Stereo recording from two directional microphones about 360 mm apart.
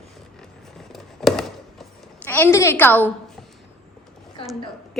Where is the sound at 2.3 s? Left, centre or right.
Centre.